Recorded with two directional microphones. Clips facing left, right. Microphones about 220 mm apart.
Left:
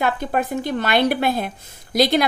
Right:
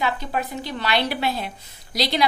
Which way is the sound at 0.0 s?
50° left (ahead or behind).